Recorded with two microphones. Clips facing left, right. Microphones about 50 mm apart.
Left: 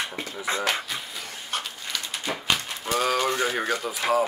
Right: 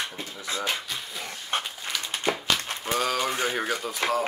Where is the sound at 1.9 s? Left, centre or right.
Centre.